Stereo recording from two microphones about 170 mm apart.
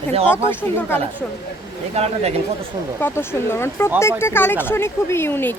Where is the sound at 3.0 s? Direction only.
15° left (ahead or behind).